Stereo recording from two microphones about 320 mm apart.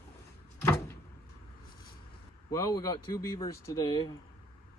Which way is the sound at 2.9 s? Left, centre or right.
Left.